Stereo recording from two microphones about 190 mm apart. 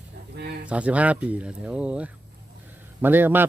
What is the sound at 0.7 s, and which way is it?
Speech, 5° right (ahead or behind).